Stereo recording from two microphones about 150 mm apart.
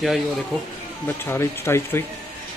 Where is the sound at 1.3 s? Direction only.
20° left (ahead or behind).